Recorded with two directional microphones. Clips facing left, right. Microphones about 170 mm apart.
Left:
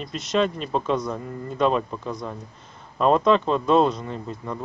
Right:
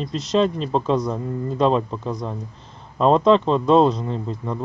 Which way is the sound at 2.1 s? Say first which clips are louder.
Right 4 dB; 20° right (ahead or behind).